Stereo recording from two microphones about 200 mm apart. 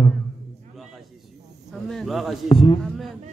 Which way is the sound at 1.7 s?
Centre (ahead or behind).